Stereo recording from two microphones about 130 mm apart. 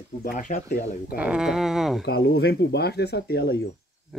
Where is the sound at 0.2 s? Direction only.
90° left.